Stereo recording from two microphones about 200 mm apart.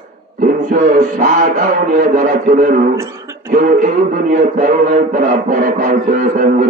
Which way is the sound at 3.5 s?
45° right (ahead or behind).